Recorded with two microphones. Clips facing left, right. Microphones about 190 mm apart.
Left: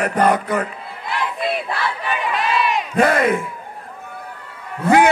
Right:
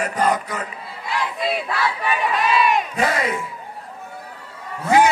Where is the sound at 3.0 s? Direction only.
55° left (ahead or behind).